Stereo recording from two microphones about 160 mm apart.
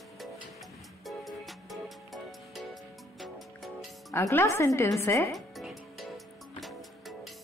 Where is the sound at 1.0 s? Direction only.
Centre (ahead or behind).